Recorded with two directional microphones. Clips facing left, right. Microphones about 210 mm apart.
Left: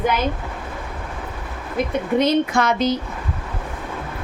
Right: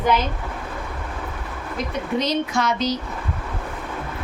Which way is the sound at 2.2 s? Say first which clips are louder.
Left 5 dB; 55° left (ahead or behind).